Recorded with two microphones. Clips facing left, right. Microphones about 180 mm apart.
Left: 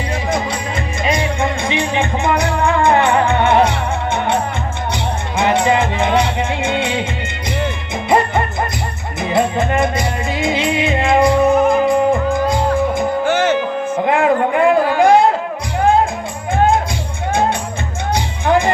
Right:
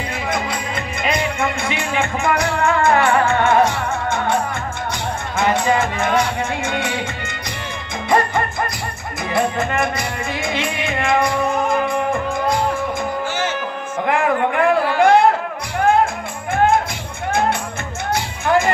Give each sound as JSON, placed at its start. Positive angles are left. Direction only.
{"t": 1.4, "sound": "music", "side_deg": 20}
{"t": 5.4, "sound": "music", "side_deg": 20}
{"t": 9.2, "sound": "music", "side_deg": 20}
{"t": 13.2, "sound": "music", "side_deg": 60}
{"t": 14.0, "sound": "a sound", "side_deg": 20}
{"t": 18.1, "sound": "music", "side_deg": 20}